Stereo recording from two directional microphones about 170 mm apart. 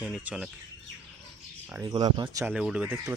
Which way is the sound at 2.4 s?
5° right (ahead or behind).